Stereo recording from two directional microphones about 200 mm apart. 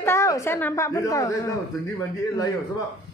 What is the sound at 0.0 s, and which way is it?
A woman's voice, 15° left (ahead or behind).